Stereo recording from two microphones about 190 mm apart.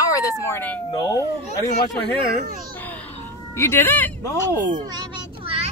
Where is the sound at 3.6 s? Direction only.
15° left (ahead or behind).